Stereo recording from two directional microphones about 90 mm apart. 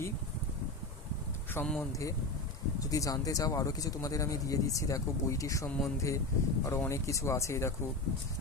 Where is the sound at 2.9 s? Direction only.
40° left (ahead or behind).